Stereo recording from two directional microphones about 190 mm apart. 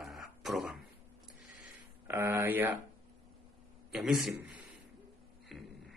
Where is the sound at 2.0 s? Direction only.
10° right (ahead or behind).